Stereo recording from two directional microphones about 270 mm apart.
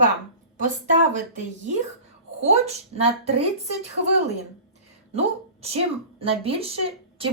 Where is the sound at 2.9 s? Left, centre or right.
Right.